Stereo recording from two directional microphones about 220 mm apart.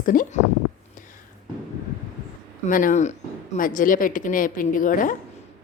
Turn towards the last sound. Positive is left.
turn(degrees=35)  # may be behind; listen again after turning